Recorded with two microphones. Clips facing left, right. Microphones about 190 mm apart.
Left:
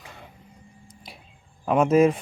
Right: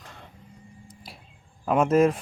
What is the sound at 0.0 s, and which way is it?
Vehicle, 5° left (ahead or behind).